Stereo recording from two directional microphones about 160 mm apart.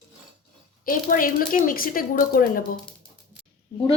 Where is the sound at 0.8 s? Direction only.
60° left (ahead or behind).